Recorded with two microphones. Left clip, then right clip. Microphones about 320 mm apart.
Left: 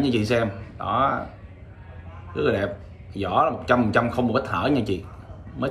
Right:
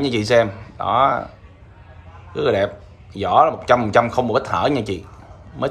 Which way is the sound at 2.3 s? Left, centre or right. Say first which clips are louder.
Right 5 dB; right.